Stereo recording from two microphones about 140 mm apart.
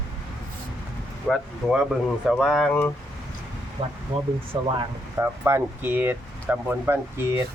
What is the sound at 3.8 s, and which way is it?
Speech, 35° right (ahead or behind).